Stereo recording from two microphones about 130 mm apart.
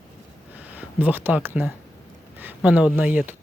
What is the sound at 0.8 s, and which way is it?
Speech, 15° right (ahead or behind).